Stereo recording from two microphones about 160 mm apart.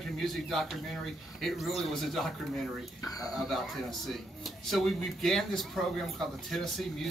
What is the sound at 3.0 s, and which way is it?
Speech, 20° left (ahead or behind).